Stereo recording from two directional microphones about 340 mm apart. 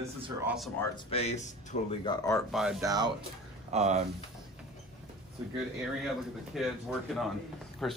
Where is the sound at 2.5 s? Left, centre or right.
Centre.